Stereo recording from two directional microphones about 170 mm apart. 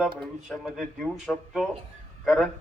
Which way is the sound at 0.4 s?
Centre (ahead or behind).